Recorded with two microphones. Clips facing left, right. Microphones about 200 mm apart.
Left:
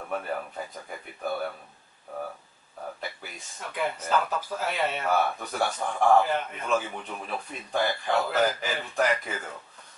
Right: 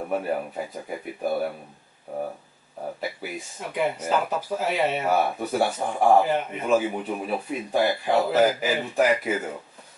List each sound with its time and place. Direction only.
0.0 s speech: 15° right (ahead or behind)
3.0 s speech: 10° right (ahead or behind)
5.7 s a man's voice: 20° right (ahead or behind)
9.3 s a man's voice: 20° right (ahead or behind)